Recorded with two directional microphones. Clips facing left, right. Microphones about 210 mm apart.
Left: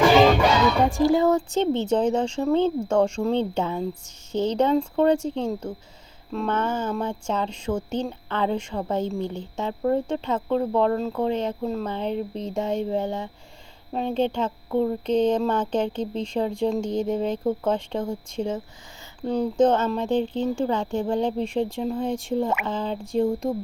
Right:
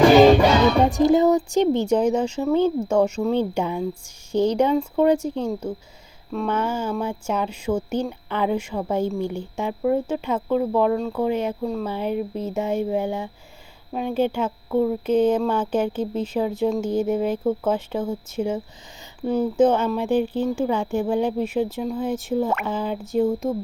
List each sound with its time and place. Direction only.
0.9 s speech: 20° right (ahead or behind); by 23.6 s centre (ahead or behind)